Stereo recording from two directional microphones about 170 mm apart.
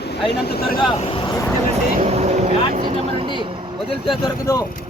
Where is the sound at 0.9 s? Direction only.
30° left (ahead or behind).